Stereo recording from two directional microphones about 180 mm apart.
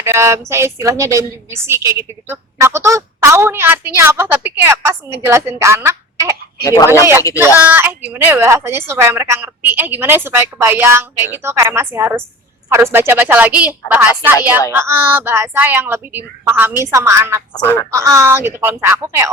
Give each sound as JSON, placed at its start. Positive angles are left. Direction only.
{"t": 0.0, "sound": "a woman's voice", "side_deg": -15}
{"t": 6.6, "sound": "speech", "side_deg": 20}
{"t": 7.3, "sound": "a woman's voice", "side_deg": -10}
{"t": 17.5, "sound": "speech", "side_deg": 20}
{"t": 17.9, "sound": "a woman's voice", "side_deg": -15}